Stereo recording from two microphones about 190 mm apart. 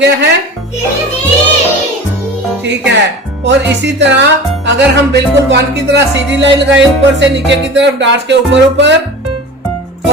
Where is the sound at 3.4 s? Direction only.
65° right (ahead or behind).